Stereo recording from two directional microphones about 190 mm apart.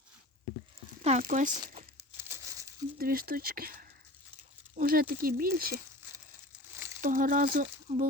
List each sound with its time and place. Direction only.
1.0 s speech: 40° right (ahead or behind)
2.1 s crumpling: 15° right (ahead or behind)
3.0 s speech: 50° right (ahead or behind)
6.7 s crumpling: 15° right (ahead or behind)
7.0 s speech: 45° right (ahead or behind)